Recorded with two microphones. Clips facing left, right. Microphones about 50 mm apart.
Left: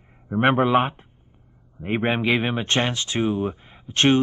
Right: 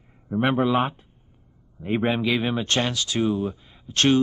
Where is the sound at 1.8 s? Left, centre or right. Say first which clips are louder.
Even; left.